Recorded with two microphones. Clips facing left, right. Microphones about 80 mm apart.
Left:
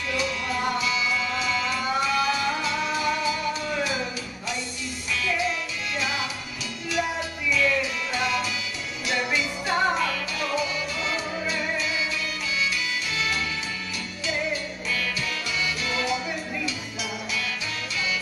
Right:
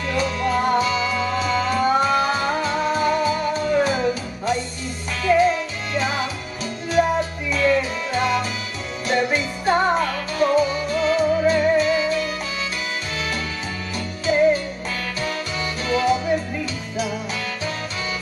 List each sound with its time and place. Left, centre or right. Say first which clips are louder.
0.1 s music: right 7 dB; right
5.2 s music: right 11 dB; right
14.2 s music: right 12 dB; right